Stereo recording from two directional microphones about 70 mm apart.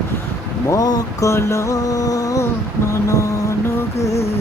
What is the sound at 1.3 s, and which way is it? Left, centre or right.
Music, left.